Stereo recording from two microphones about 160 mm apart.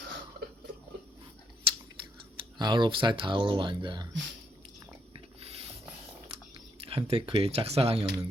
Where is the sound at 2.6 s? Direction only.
30° right (ahead or behind).